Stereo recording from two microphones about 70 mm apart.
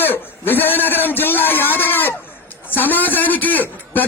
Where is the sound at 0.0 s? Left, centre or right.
Left.